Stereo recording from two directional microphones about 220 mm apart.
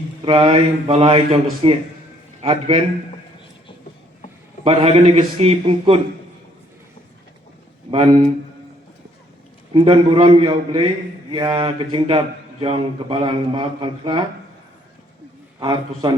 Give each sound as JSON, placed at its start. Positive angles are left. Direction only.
{"t": 0.3, "sound": "a man's voice", "side_deg": -25}
{"t": 4.6, "sound": "a man's voice", "side_deg": -25}
{"t": 7.9, "sound": "speech", "side_deg": -25}
{"t": 9.7, "sound": "a man's voice", "side_deg": -25}
{"t": 15.6, "sound": "a man's voice", "side_deg": -20}